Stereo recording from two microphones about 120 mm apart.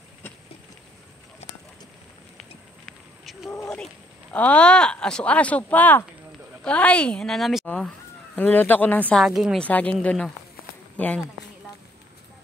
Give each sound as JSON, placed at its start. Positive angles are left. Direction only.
{"t": 3.6, "sound": "speech", "side_deg": 5}
{"t": 9.2, "sound": "speech", "side_deg": 0}
{"t": 9.6, "sound": "speech", "side_deg": 10}